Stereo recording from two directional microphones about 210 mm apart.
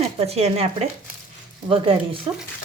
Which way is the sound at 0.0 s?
30° right (ahead or behind).